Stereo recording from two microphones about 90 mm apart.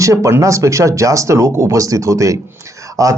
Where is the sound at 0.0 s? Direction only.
35° right (ahead or behind).